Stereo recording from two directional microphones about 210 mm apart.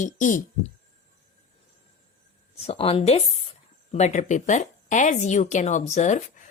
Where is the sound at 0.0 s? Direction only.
40° left (ahead or behind).